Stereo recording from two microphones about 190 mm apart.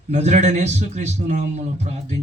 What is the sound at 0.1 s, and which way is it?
A man's voice, 35° right (ahead or behind).